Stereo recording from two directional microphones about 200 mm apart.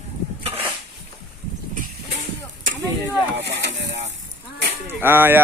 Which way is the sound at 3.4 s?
60° right (ahead or behind).